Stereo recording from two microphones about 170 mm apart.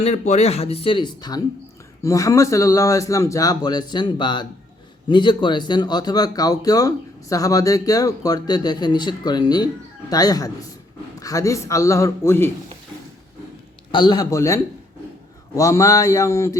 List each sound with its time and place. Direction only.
0.0 s a man's voice: 40° left (ahead or behind); by 12.5 s 15° left (ahead or behind)
13.9 s a man's voice: 25° left (ahead or behind)